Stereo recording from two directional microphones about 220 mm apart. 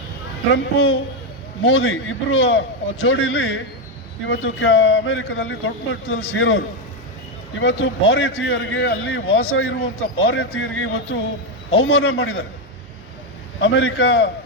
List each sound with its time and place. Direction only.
0.5 s a man's voice: 65° left (ahead or behind)
13.6 s a man's voice: 60° left (ahead or behind)